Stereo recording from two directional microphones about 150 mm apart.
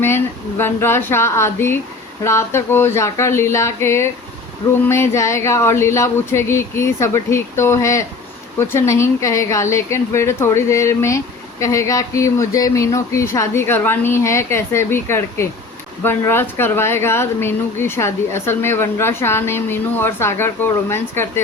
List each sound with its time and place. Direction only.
0.0 s a woman's voice: 15° left (ahead or behind)